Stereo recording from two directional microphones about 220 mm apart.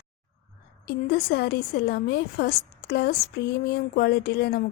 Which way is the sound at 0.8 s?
45° left (ahead or behind).